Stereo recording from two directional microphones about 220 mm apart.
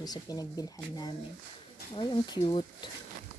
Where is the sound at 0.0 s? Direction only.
15° left (ahead or behind).